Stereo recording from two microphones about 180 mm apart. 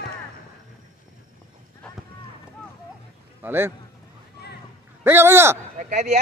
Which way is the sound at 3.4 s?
15° right (ahead or behind).